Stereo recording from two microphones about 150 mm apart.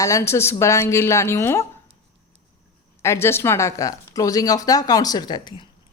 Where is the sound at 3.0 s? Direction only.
20° left (ahead or behind).